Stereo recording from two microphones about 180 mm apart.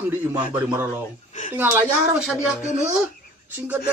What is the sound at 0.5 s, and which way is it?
Speech, 10° right (ahead or behind).